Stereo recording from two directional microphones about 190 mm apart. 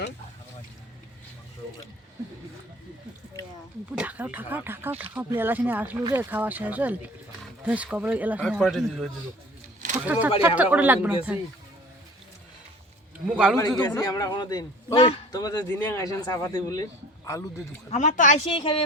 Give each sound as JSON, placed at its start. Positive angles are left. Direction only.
{"t": 3.9, "sound": "a man's voice", "side_deg": -5}
{"t": 10.1, "sound": "speech", "side_deg": -10}
{"t": 13.2, "sound": "speech", "side_deg": -5}
{"t": 13.7, "sound": "a man's voice", "side_deg": 20}
{"t": 17.9, "sound": "speech", "side_deg": 40}
{"t": 18.6, "sound": "a man's voice", "side_deg": 30}